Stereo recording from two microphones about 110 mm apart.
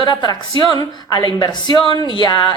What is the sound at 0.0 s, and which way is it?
A woman's voice, 40° left (ahead or behind).